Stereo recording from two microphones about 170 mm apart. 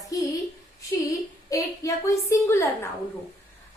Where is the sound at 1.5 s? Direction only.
20° left (ahead or behind).